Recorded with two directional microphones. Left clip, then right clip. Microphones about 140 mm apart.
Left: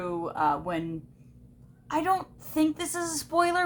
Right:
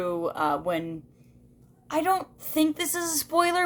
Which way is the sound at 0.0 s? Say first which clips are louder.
Right 1 dB; 40° right (ahead or behind).